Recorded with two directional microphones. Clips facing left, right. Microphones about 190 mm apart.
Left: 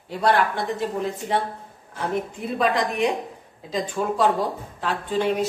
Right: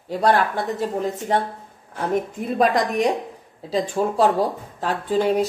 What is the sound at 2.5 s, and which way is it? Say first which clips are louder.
A woman's voice: right 3 dB; 45° right (ahead or behind).